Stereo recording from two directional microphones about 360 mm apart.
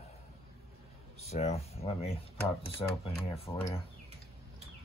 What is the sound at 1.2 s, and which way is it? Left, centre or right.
Speech, centre.